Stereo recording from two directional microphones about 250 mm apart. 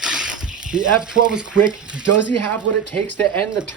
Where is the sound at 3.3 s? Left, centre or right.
Centre.